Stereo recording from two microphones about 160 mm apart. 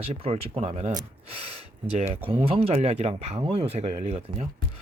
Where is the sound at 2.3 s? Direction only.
35° right (ahead or behind).